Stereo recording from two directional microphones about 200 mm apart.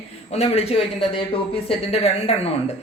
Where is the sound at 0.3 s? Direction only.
30° left (ahead or behind).